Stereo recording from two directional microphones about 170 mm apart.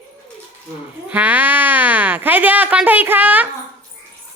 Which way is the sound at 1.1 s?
10° right (ahead or behind).